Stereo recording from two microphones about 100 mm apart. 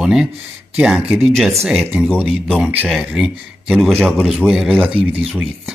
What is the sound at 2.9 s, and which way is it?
Speech, centre (ahead or behind).